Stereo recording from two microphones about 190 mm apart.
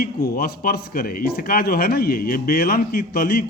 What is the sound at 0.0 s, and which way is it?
A man's voice, 55° left (ahead or behind).